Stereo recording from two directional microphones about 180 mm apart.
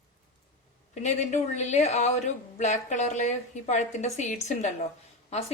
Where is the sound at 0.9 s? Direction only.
40° left (ahead or behind).